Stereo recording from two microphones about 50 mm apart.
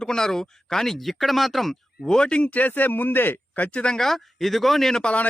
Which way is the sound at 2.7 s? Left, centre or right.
Left.